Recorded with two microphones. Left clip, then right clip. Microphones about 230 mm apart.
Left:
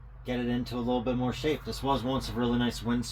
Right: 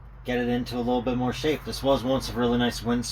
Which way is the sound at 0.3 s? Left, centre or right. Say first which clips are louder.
Right 6 dB; centre.